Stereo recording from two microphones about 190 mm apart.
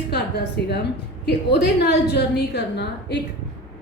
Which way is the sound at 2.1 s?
60° left (ahead or behind).